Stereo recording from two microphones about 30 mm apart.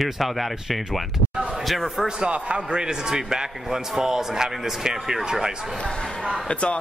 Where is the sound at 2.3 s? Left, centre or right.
Right.